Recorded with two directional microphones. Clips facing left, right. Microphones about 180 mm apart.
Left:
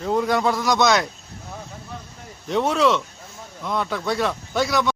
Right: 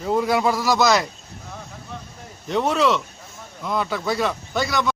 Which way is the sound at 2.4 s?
Centre (ahead or behind).